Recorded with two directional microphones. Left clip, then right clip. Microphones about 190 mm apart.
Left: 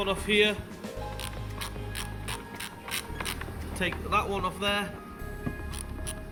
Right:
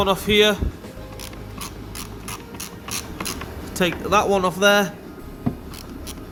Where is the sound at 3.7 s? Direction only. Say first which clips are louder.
Right 9 dB; 15° right (ahead or behind).